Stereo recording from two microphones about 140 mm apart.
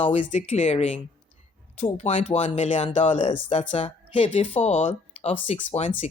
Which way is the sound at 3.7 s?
40° left (ahead or behind).